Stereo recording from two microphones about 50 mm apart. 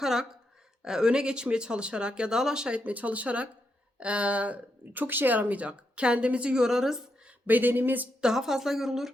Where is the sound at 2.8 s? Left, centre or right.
Right.